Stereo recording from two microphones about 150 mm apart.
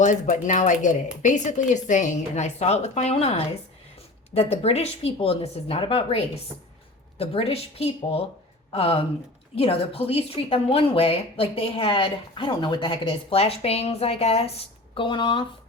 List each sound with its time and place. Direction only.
0.0 s a woman's voice: 55° left (ahead or behind); by 15.4 s 35° left (ahead or behind)